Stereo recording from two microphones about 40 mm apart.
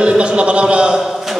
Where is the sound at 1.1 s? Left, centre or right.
Centre.